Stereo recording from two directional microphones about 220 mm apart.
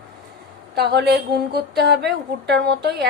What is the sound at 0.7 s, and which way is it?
A woman's voice, 50° right (ahead or behind).